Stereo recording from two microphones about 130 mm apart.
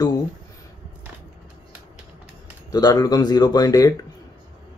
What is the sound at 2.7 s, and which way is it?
Speech, 30° left (ahead or behind).